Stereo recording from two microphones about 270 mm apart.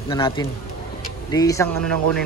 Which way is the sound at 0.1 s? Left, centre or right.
Centre.